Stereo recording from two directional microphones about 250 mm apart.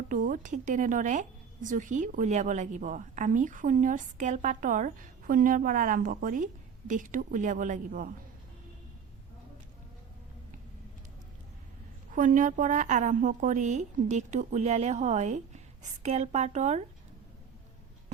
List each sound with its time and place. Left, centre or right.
0.1 s a woman's voice: right
12.1 s a woman's voice: right